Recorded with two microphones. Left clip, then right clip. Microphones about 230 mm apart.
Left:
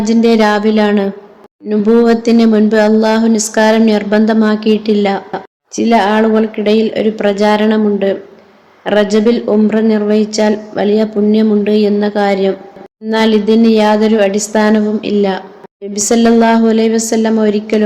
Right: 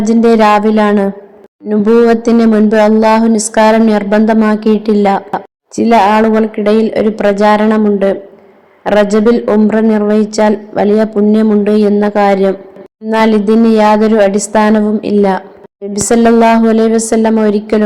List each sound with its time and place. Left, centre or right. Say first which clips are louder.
0.0 s speech: right 3 dB; centre